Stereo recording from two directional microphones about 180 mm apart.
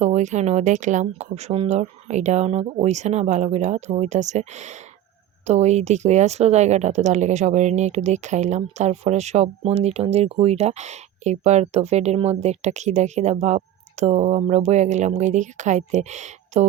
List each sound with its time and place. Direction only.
0.0 s a woman's voice: 40° right (ahead or behind)